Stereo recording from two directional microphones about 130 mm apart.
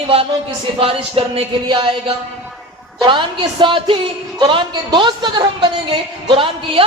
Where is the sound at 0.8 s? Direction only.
45° right (ahead or behind).